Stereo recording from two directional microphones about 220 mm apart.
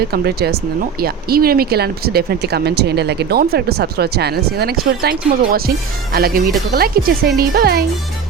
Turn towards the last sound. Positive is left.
turn(degrees=-45)  # may be behind; listen again after turning